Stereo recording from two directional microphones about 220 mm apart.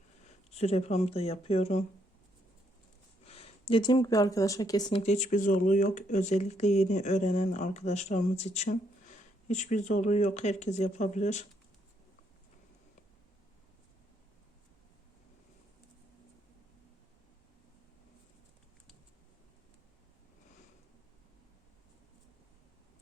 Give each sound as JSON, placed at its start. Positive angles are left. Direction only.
{"t": 0.5, "sound": "speech", "side_deg": 30}
{"t": 3.2, "sound": "speech", "side_deg": 25}